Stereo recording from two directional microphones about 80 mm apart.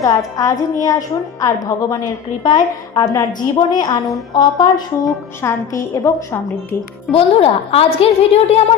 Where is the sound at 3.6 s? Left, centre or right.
Left.